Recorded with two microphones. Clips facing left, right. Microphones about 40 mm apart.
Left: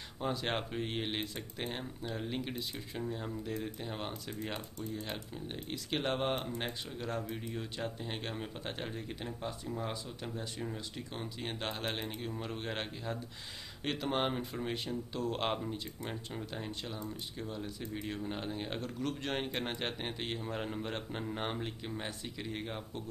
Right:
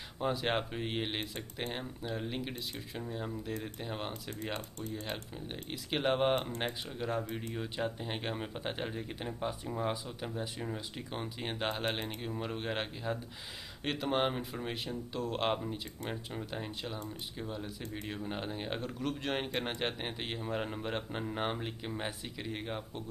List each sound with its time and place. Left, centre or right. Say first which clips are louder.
0.2 s speech: right 3 dB; centre
4.7 s speech: even; right
5.0 s speech: right 1 dB; centre